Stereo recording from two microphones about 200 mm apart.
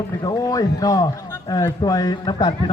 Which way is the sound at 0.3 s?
20° left (ahead or behind).